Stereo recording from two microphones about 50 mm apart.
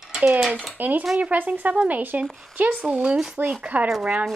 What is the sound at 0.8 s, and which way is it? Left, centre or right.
Speech, right.